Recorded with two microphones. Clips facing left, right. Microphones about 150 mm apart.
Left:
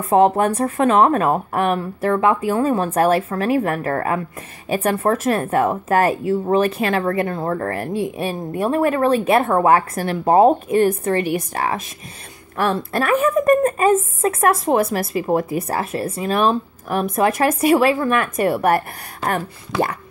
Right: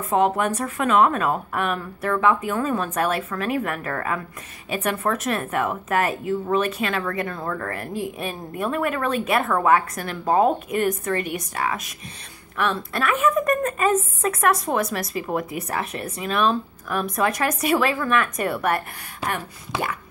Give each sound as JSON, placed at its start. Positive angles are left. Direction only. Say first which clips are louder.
{"t": 0.1, "sound": "speech", "louder": "left 6 dB", "side_deg": 30}